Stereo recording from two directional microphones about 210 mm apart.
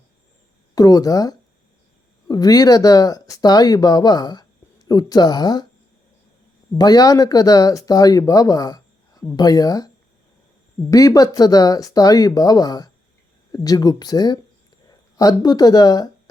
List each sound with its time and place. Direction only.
0.8 s speech: 15° left (ahead or behind)
6.7 s speech: 20° left (ahead or behind)
10.9 s speech: 15° left (ahead or behind)